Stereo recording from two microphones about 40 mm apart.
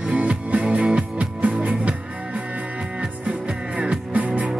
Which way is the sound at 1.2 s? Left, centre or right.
Right.